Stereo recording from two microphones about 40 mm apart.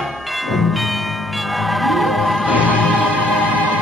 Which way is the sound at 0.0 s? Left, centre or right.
Centre.